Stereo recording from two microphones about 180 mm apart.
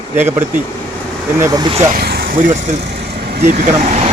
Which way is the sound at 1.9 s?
60° right (ahead or behind).